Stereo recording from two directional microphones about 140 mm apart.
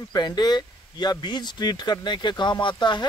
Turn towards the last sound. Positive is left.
turn(degrees=35)  # may be behind; listen again after turning